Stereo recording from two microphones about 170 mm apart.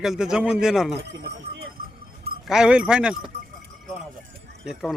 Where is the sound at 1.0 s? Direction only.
75° right (ahead or behind).